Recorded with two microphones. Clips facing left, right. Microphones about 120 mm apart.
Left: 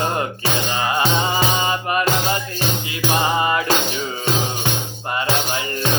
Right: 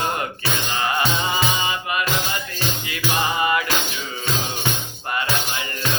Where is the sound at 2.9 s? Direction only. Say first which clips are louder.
Left 4 dB; 30° left (ahead or behind).